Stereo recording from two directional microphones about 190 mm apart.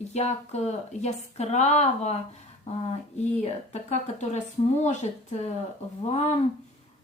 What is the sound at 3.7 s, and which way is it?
Speech, 35° left (ahead or behind).